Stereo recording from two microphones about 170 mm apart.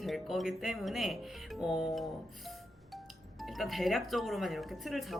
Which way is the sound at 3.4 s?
Centre (ahead or behind).